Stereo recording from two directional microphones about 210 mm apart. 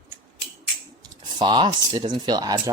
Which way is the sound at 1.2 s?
20° right (ahead or behind).